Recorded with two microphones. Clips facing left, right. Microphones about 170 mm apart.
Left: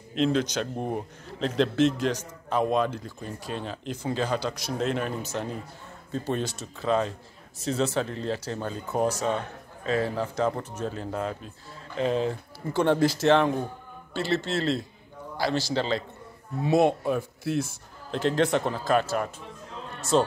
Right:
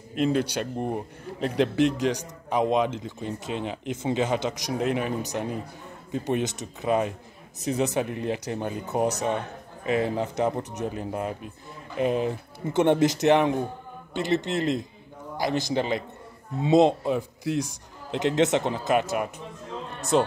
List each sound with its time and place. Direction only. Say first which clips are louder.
0.2 s a man's voice: even; 10° right (ahead or behind)